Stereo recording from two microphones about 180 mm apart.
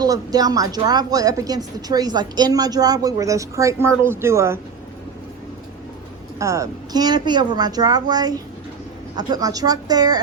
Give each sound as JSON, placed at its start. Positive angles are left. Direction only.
{"t": 0.0, "sound": "a woman's voice", "side_deg": -20}
{"t": 6.4, "sound": "a woman's voice", "side_deg": -15}